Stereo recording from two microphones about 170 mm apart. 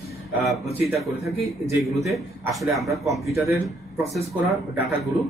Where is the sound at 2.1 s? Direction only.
Centre (ahead or behind).